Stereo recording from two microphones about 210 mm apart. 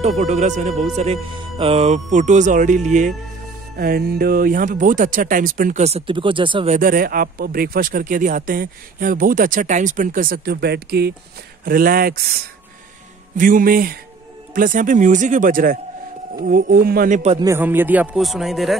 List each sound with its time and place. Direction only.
0.0 s speech: 35° right (ahead or behind)
13.4 s speech: 40° right (ahead or behind)
17.4 s speech: 10° right (ahead or behind)